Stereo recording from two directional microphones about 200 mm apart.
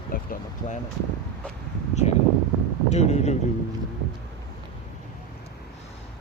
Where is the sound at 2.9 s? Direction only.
35° left (ahead or behind).